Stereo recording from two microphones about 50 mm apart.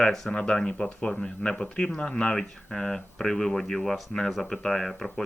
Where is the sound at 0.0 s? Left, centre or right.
Centre.